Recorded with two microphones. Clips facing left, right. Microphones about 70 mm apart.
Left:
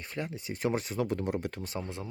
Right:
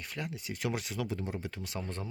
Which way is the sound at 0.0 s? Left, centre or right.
Left.